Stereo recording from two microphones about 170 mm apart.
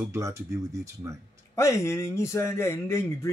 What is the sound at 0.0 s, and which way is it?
Speech, 15° right (ahead or behind).